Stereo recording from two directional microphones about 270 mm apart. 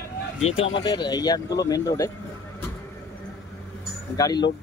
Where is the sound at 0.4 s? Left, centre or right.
Left.